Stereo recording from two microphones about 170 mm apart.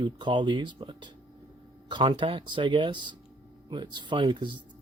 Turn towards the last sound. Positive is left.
turn(degrees=-30)  # may be behind; listen again after turning